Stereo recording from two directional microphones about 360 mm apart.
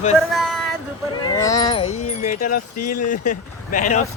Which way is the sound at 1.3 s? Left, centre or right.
Centre.